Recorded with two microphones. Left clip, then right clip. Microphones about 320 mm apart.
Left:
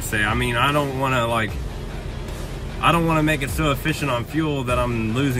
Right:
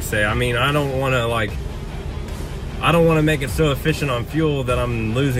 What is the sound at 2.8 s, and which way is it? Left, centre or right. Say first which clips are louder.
Speech: right 2 dB; left.